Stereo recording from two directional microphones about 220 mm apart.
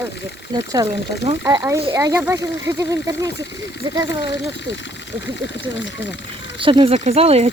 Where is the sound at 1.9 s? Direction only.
15° right (ahead or behind).